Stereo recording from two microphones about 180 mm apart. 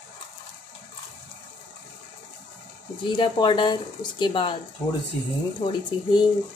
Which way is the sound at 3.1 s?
25° left (ahead or behind).